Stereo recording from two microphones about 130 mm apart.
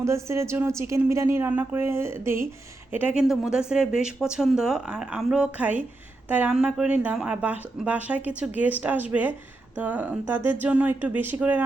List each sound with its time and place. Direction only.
0.0 s a woman's voice: 20° right (ahead or behind)